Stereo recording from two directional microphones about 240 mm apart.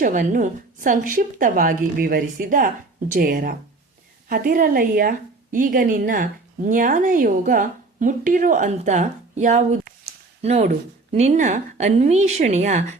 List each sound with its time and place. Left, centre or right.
0.0 s a woman's voice: right